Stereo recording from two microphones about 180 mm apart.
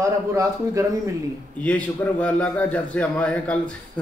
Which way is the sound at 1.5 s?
10° left (ahead or behind).